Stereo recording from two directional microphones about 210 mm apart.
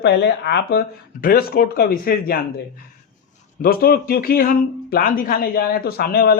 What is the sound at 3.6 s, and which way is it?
A man's voice, 45° left (ahead or behind).